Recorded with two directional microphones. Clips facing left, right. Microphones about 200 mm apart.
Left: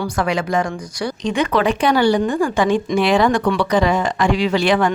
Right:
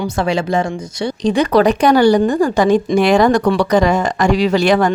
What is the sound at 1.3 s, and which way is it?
A woman's voice, 35° right (ahead or behind).